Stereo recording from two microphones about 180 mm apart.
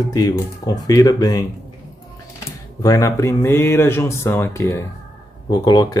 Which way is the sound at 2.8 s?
15° left (ahead or behind).